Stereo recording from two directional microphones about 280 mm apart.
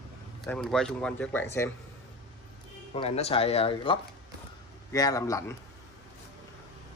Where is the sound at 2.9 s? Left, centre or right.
Left.